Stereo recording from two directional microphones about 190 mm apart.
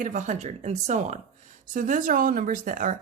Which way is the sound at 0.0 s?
40° right (ahead or behind).